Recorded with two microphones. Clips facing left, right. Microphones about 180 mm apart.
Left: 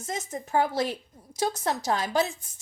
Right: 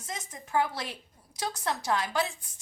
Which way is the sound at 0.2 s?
45° left (ahead or behind).